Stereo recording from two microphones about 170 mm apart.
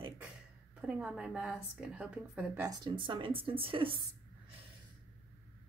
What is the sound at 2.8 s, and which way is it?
Speech, 30° right (ahead or behind).